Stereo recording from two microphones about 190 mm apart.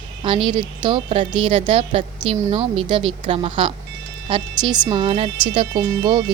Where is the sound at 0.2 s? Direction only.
25° right (ahead or behind).